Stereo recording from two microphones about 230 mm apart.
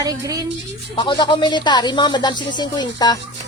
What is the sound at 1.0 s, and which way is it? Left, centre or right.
Speech, centre.